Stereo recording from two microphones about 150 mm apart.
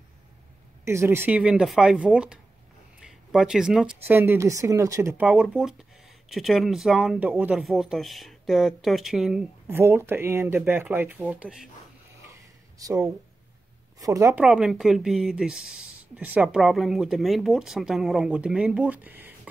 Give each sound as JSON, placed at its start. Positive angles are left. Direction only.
{"t": 0.8, "sound": "speech", "side_deg": -15}
{"t": 5.2, "sound": "speech", "side_deg": -5}
{"t": 9.7, "sound": "speech", "side_deg": -15}
{"t": 12.7, "sound": "speech", "side_deg": -20}
{"t": 14.3, "sound": "speech", "side_deg": -5}